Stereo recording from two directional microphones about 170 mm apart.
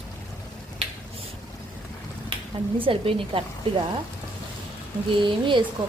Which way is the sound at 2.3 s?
30° right (ahead or behind).